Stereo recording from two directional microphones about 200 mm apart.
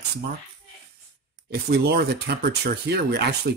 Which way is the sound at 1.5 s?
55° right (ahead or behind).